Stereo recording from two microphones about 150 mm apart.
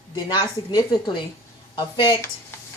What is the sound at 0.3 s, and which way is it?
A woman's voice, 25° left (ahead or behind).